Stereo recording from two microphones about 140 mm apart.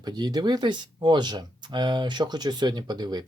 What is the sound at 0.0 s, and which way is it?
Speech, 30° right (ahead or behind).